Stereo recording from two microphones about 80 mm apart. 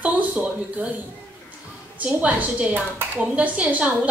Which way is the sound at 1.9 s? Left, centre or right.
Centre.